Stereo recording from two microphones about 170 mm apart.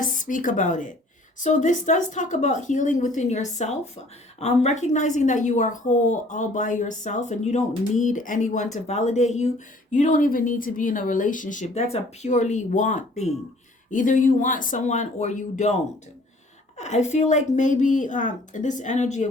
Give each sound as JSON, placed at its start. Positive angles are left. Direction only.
{"t": 0.2, "sound": "a woman's voice", "side_deg": 50}